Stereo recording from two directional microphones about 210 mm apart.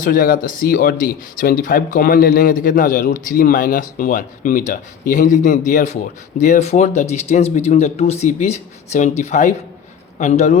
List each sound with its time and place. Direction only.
0.0 s speech: 40° left (ahead or behind)